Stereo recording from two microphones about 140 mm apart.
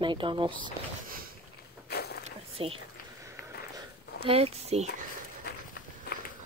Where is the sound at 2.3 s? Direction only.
45° right (ahead or behind).